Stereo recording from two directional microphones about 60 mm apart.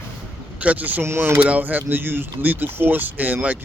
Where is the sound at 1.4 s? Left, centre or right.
Right.